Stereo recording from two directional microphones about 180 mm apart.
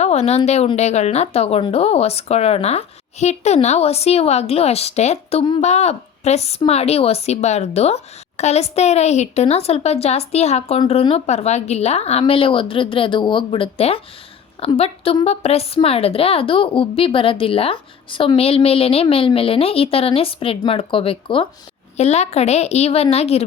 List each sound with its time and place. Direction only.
0.0 s a woman's voice: 35° left (ahead or behind)